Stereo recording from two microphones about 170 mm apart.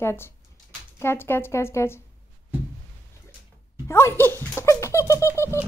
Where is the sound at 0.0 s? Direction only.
15° left (ahead or behind).